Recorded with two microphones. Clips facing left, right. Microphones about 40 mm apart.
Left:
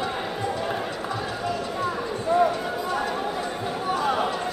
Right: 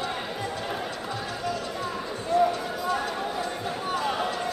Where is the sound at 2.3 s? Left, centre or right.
Centre.